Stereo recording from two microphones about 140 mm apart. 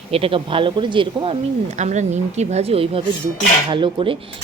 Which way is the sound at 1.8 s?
55° right (ahead or behind).